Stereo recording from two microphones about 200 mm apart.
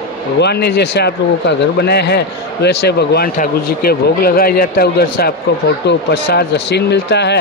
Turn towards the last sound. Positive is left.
turn(degrees=60)  # may be behind; listen again after turning